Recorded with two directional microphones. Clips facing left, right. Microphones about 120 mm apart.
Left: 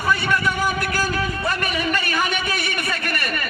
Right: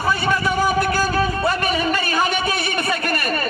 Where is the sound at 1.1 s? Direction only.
30° right (ahead or behind).